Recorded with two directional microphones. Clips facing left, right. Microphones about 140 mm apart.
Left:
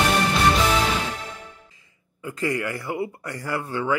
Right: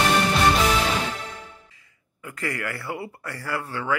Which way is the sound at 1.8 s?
25° left (ahead or behind).